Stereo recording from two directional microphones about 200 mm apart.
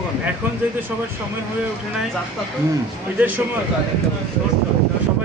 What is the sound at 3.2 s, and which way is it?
Speech, 10° right (ahead or behind).